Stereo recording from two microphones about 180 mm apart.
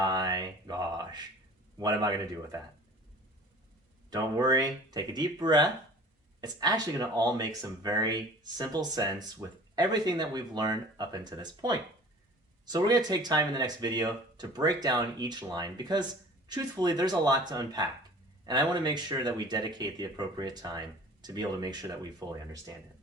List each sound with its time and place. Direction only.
0.0 s a sound: 20° right (ahead or behind)
1.8 s speech: 20° right (ahead or behind)
4.1 s speech: 20° right (ahead or behind)